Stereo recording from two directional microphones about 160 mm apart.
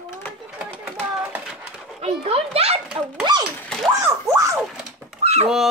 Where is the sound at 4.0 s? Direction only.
20° right (ahead or behind).